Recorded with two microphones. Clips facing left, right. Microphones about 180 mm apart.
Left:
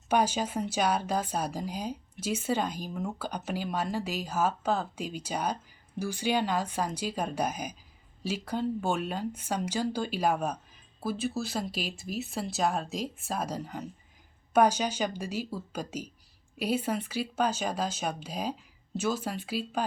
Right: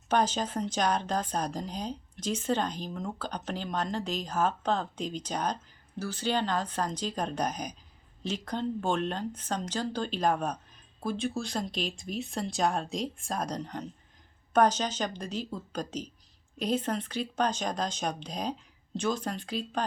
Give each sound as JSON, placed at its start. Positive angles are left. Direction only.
{"t": 0.1, "sound": "speech", "side_deg": 10}